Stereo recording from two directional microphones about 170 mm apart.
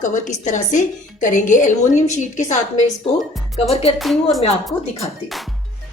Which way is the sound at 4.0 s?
Centre (ahead or behind).